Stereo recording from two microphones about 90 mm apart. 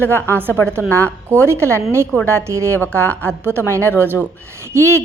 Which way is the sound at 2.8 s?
20° left (ahead or behind).